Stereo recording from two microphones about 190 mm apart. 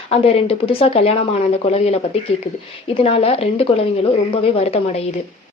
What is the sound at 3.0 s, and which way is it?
A woman's voice, 30° left (ahead or behind).